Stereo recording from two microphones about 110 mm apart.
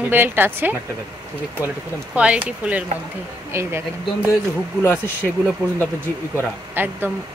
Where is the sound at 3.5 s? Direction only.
25° right (ahead or behind).